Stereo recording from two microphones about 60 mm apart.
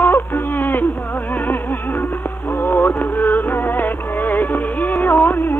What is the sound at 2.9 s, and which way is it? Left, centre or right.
Music, left.